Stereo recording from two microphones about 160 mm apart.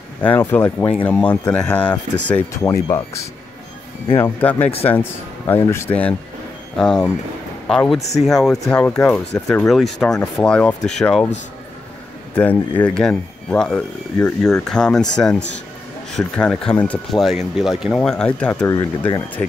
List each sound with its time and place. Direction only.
0.4 s speech: 10° left (ahead or behind)
2.6 s speech: 20° left (ahead or behind)
4.2 s speech: 10° left (ahead or behind)
12.4 s speech: 10° left (ahead or behind)
18.7 s speech: 20° left (ahead or behind)